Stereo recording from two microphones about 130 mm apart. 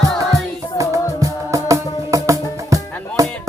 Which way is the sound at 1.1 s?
25° right (ahead or behind).